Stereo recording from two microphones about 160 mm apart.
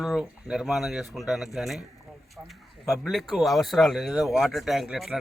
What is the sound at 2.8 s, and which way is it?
Speech, centre (ahead or behind).